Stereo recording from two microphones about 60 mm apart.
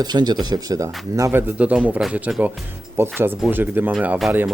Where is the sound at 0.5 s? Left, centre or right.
Right.